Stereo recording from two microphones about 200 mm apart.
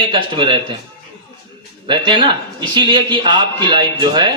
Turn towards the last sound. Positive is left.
turn(degrees=-20)  # may be behind; listen again after turning